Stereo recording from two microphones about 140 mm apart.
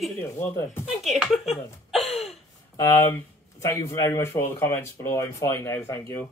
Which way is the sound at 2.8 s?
20° left (ahead or behind).